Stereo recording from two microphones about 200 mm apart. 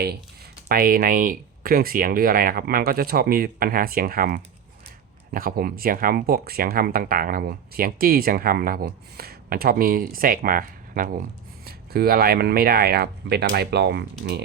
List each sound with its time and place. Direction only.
0.7 s speech: 45° right (ahead or behind)